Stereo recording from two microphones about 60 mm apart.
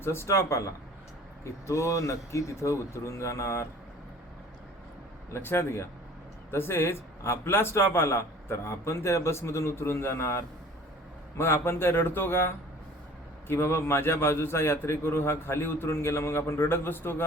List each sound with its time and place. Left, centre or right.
0.0 s a man's voice: left
1.6 s a man's voice: left
5.3 s a man's voice: left
13.5 s a man's voice: left